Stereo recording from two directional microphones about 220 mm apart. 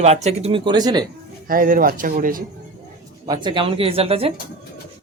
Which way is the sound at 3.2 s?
20° right (ahead or behind).